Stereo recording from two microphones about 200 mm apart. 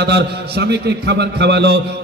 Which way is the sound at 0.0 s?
55° right (ahead or behind).